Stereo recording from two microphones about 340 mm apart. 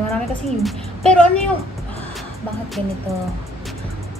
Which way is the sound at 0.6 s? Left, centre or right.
Centre.